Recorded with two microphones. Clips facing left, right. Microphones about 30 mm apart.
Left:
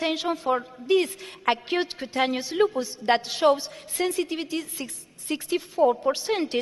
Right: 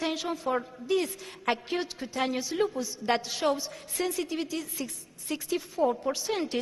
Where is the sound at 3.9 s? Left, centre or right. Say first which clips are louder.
Left 4 dB; left.